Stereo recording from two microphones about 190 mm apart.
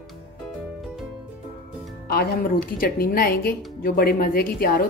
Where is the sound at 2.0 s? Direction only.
55° left (ahead or behind).